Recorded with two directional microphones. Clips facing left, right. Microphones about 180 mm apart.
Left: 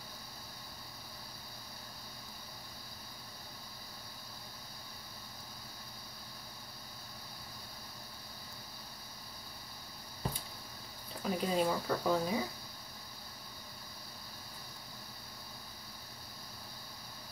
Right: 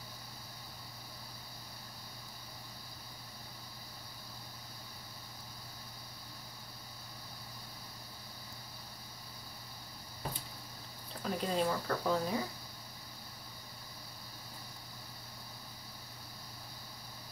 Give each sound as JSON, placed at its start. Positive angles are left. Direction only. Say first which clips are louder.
{"t": 11.2, "sound": "speech", "louder": "left 1 dB", "side_deg": 5}